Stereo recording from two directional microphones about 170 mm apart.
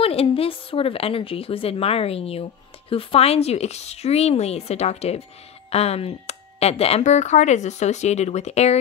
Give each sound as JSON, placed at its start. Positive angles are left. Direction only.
{"t": 0.0, "sound": "speech", "side_deg": 35}